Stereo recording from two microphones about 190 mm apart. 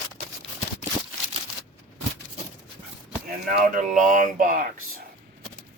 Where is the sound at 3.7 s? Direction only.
45° right (ahead or behind).